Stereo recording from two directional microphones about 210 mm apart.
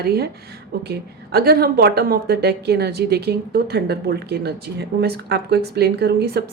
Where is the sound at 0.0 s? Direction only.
50° right (ahead or behind).